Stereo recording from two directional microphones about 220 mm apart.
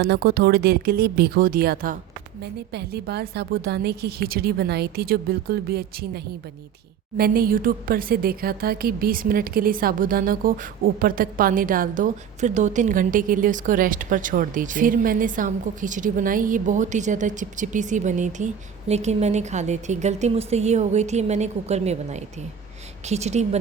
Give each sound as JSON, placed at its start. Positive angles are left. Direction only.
{"t": 0.0, "sound": "a woman's voice", "side_deg": -45}